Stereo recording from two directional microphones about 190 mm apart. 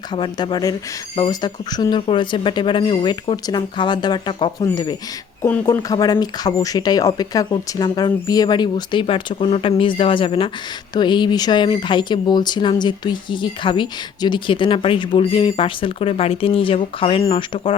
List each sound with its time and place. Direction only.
0.1 s speech: 25° left (ahead or behind)